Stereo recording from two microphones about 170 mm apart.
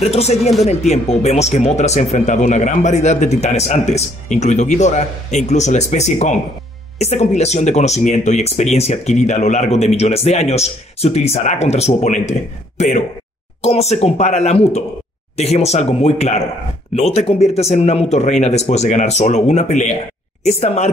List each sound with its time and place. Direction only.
0.0 s speech: 40° left (ahead or behind)